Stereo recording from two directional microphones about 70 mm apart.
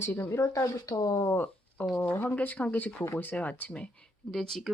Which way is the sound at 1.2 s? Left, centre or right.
Left.